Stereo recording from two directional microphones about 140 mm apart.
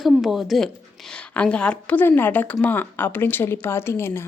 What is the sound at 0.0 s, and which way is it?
A woman's voice, centre (ahead or behind).